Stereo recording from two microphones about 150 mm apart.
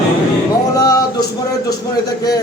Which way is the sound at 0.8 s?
25° left (ahead or behind).